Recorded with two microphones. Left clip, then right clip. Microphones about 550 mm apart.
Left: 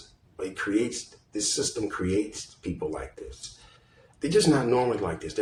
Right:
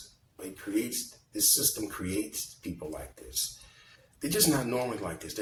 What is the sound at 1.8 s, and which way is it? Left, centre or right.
Speech, right.